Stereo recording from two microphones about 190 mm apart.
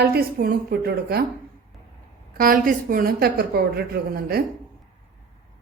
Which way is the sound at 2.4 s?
50° right (ahead or behind).